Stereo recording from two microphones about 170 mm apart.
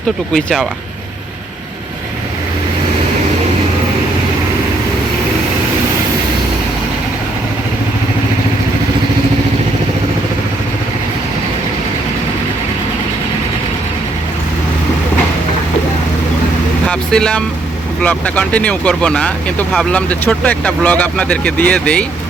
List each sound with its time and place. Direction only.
0.3 s speech: centre (ahead or behind)
16.9 s speech: 5° left (ahead or behind)